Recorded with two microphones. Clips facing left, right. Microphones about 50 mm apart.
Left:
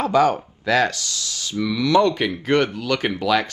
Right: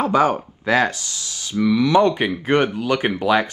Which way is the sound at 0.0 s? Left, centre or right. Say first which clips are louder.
Even; right.